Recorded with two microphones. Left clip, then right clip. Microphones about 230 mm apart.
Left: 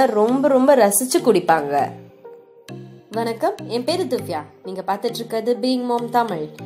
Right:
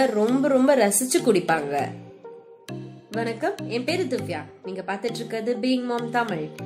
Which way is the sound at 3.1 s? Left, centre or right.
Centre.